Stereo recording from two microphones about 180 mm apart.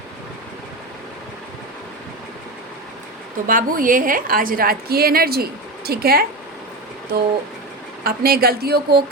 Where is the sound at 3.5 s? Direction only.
50° right (ahead or behind).